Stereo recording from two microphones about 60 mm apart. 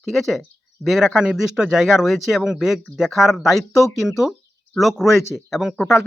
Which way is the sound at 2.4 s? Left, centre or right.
Centre.